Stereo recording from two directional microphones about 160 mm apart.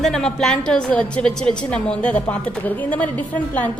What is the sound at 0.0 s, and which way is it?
A woman's voice, 5° left (ahead or behind).